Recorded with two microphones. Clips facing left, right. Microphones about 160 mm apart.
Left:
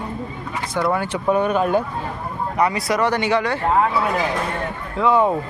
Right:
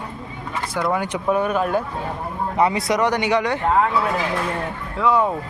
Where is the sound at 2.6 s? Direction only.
25° right (ahead or behind).